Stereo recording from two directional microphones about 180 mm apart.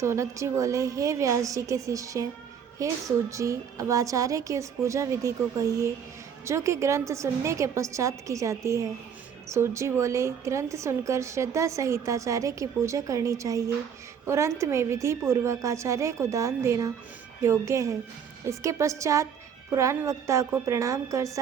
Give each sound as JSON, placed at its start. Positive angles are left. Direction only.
{"t": 0.0, "sound": "a woman's voice", "side_deg": -15}